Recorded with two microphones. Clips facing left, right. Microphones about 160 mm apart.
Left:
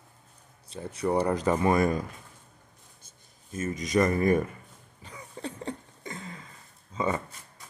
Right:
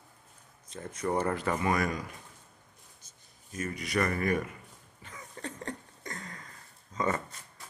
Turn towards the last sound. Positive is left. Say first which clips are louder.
# left 2 dB
turn(degrees=15)  # may be behind; listen again after turning